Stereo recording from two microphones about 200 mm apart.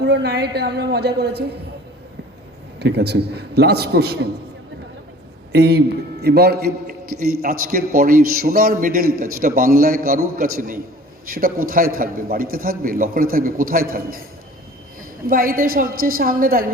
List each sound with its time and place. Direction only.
0.0 s a woman's voice: 55° right (ahead or behind)
2.7 s a man's voice: 55° right (ahead or behind)
5.5 s a man's voice: 55° right (ahead or behind)
15.3 s a man's voice: 45° right (ahead or behind)